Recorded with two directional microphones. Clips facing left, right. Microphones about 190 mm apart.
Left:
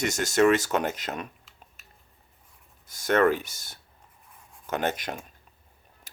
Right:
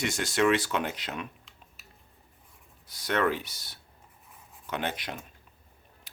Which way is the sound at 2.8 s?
45° left (ahead or behind).